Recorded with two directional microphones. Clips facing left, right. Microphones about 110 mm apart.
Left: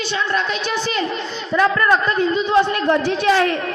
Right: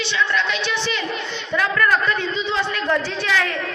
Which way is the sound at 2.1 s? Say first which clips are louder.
Left 5 dB; 40° left (ahead or behind).